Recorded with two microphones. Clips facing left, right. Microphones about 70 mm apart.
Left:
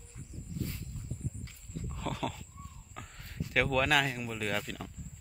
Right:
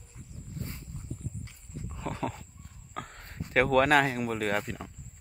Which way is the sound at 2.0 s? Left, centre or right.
Right.